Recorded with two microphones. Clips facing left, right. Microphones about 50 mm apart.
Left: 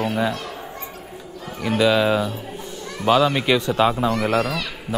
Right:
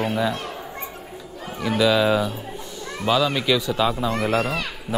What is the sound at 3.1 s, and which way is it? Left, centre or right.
A man's voice, left.